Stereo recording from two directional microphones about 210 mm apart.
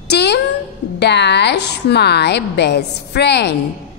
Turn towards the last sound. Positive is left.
turn(degrees=50)  # may be behind; listen again after turning